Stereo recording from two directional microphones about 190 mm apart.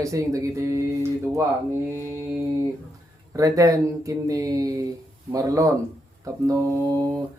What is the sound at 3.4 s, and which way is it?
Speech, 15° right (ahead or behind).